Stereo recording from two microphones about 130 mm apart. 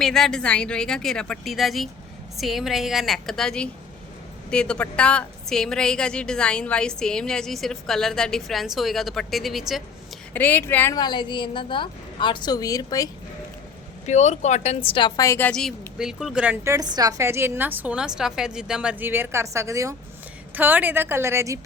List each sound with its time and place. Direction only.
0.0 s a woman's voice: 5° left (ahead or behind)
10.3 s speech: 15° left (ahead or behind)
10.9 s a woman's voice: 35° left (ahead or behind)
14.1 s speech: 65° left (ahead or behind); by 15.4 s 25° left (ahead or behind)
15.4 s speech: 10° left (ahead or behind)
16.0 s a woman's voice: 5° right (ahead or behind)
16.6 s a woman's voice: 25° right (ahead or behind)